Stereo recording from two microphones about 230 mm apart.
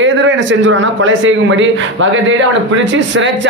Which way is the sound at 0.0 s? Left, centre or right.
Right.